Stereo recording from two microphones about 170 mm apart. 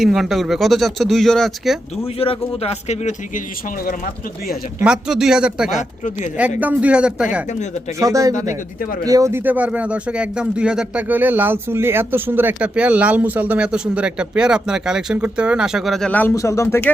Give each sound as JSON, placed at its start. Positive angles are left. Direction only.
{"t": 0.0, "sound": "speech", "side_deg": 0}
{"t": 2.1, "sound": "speech", "side_deg": 35}
{"t": 4.8, "sound": "speech", "side_deg": -5}
{"t": 5.7, "sound": "speech", "side_deg": 45}
{"t": 6.6, "sound": "speech", "side_deg": -10}
{"t": 7.9, "sound": "speech", "side_deg": -20}
{"t": 8.8, "sound": "speech", "side_deg": 55}
{"t": 9.0, "sound": "speech", "side_deg": -20}